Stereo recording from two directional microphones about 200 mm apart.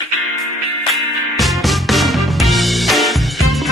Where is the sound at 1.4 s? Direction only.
Centre (ahead or behind).